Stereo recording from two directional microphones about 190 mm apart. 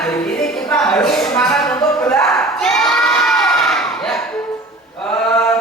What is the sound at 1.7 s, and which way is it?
Crowd, 10° left (ahead or behind).